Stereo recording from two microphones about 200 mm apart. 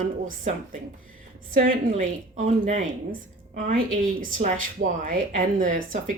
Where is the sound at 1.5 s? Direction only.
40° right (ahead or behind).